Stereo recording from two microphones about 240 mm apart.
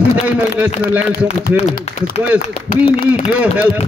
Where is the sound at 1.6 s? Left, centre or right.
Left.